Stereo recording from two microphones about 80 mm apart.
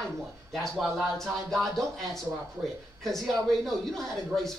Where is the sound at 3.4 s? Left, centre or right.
Centre.